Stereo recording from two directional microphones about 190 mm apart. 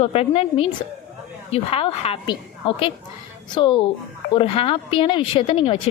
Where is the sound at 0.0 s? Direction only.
30° left (ahead or behind).